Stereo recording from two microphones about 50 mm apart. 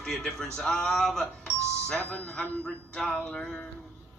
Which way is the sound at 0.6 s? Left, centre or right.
Centre.